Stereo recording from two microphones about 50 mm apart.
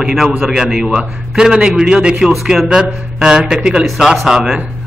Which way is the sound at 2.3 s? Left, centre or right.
Centre.